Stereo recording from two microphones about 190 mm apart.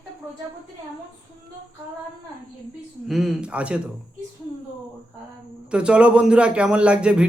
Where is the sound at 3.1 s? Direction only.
Centre (ahead or behind).